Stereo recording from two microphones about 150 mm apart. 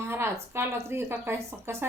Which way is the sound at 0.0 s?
15° right (ahead or behind).